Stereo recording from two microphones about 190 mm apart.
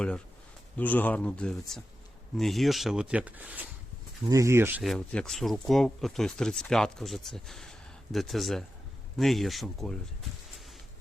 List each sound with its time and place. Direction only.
0.8 s speech: 10° left (ahead or behind); by 4.8 s 10° right (ahead or behind)
4.8 s speech: centre (ahead or behind)